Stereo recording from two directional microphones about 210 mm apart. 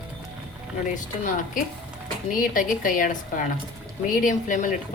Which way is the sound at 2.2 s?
40° left (ahead or behind).